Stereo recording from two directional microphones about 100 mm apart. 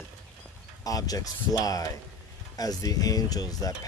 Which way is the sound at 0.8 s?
35° left (ahead or behind).